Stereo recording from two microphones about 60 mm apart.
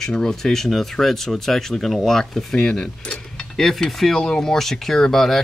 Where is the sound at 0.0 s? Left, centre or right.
Centre.